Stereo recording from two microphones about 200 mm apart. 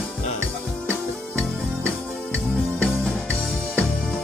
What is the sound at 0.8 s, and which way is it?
Music, 5° left (ahead or behind).